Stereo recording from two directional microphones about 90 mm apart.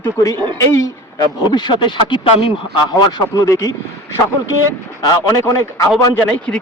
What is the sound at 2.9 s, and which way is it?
Speech, 40° left (ahead or behind).